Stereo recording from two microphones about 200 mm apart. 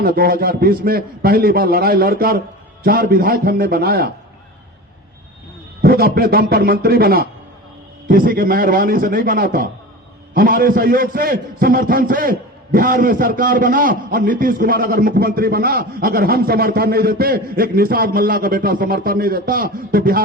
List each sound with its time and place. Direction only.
0.0 s a man's voice: 45° right (ahead or behind)
5.8 s a man's voice: 50° right (ahead or behind)